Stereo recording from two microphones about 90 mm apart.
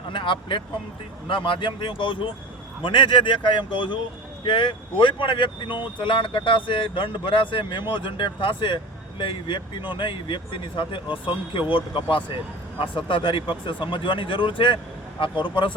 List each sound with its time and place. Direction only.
0.1 s speech: 65° left (ahead or behind)